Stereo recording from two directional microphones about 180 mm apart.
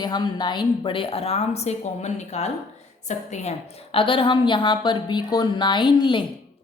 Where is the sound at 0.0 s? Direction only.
25° left (ahead or behind).